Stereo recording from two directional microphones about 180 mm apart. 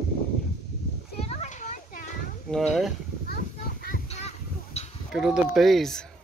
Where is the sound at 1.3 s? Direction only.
40° left (ahead or behind).